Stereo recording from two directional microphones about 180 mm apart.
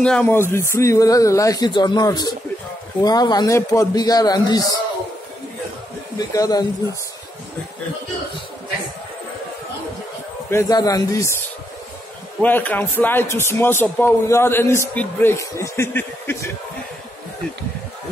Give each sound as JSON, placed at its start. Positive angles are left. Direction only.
{"t": 0.0, "sound": "a man's voice", "side_deg": 5}
{"t": 6.1, "sound": "speech", "side_deg": 20}
{"t": 10.5, "sound": "a man's voice", "side_deg": 20}
{"t": 12.4, "sound": "speech", "side_deg": 10}